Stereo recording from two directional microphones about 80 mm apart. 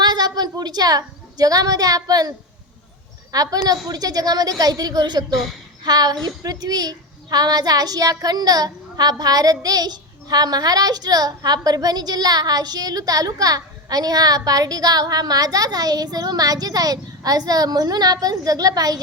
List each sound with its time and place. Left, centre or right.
0.0 s a woman's voice: right
3.3 s a woman's voice: right